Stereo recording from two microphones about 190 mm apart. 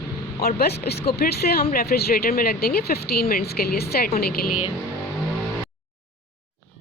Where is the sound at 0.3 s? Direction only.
55° left (ahead or behind).